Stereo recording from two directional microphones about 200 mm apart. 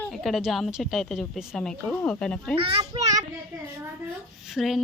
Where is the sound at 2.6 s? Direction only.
25° right (ahead or behind).